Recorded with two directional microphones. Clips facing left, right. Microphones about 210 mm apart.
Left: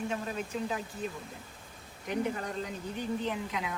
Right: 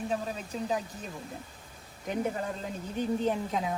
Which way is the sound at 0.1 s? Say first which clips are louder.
Right 1 dB; 35° right (ahead or behind).